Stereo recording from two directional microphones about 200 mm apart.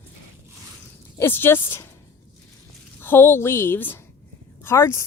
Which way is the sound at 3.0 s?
10° left (ahead or behind).